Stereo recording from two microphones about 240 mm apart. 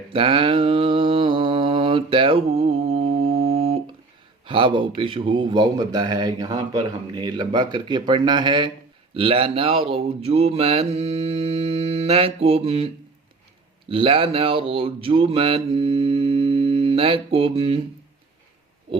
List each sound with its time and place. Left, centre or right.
0.1 s mantra: right
13.8 s speech: right